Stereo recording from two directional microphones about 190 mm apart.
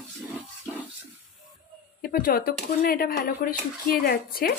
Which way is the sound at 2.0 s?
50° left (ahead or behind).